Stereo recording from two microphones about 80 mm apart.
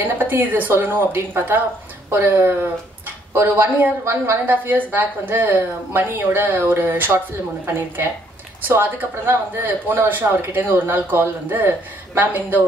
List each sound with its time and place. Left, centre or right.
0.0 s speech: right
4.0 s speech: right
4.5 s speech: right